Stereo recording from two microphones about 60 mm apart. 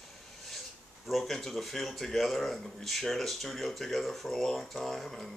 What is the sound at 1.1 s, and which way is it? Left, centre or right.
Speech, centre.